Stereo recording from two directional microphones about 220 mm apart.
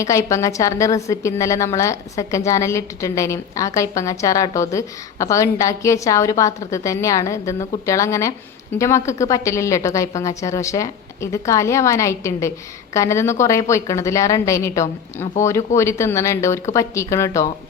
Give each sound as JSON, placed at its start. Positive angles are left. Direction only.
{"t": 0.0, "sound": "a woman's voice", "side_deg": 15}